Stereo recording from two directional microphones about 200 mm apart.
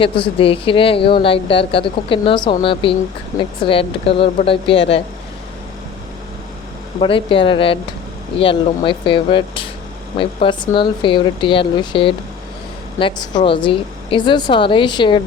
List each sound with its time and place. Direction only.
0.0 s a woman's voice: 25° left (ahead or behind)
7.0 s a woman's voice: 25° left (ahead or behind)